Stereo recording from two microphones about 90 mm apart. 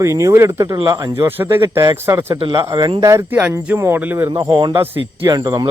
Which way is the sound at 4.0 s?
20° right (ahead or behind).